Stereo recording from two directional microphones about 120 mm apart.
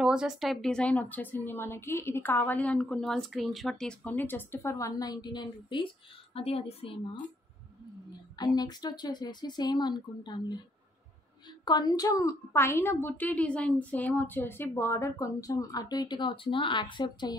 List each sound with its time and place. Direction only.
0.0 s a woman's voice: 5° right (ahead or behind)
4.0 s a woman's voice: 15° left (ahead or behind); by 5.9 s 40° left (ahead or behind)
6.3 s speech: 55° left (ahead or behind)
8.4 s speech: 35° left (ahead or behind)
11.6 s a woman's voice: 35° left (ahead or behind)